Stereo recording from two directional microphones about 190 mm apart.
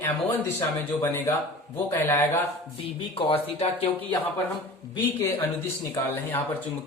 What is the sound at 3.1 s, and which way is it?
Speech, 30° left (ahead or behind).